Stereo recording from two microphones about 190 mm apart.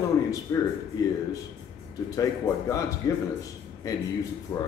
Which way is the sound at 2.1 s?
20° left (ahead or behind).